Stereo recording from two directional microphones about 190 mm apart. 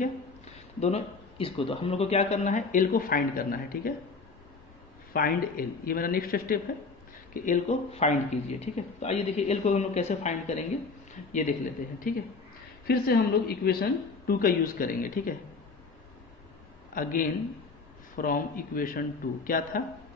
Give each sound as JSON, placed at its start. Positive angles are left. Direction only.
{"t": 0.0, "sound": "speech", "side_deg": 35}
{"t": 5.1, "sound": "a woman's voice", "side_deg": 50}
{"t": 7.4, "sound": "a man's voice", "side_deg": 40}
{"t": 12.1, "sound": "a woman's voice", "side_deg": 50}
{"t": 16.9, "sound": "a woman's voice", "side_deg": 45}